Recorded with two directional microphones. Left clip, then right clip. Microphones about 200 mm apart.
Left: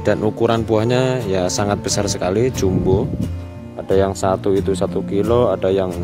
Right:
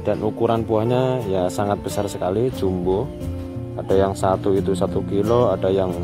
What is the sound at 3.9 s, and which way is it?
Speech, 10° left (ahead or behind).